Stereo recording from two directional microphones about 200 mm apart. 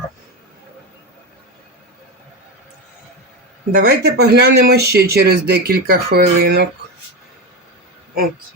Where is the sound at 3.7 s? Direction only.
50° right (ahead or behind).